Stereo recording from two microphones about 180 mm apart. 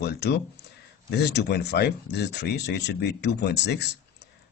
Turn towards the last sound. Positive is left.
turn(degrees=70)  # may be behind; listen again after turning